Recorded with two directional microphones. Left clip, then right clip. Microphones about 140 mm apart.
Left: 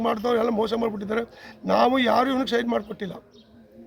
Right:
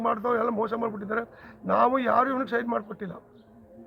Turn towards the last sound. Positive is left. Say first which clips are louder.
# left 3 dB
turn(degrees=15)  # may be behind; listen again after turning